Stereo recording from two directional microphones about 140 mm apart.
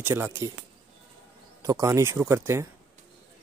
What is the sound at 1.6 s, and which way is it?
Speech, 25° right (ahead or behind).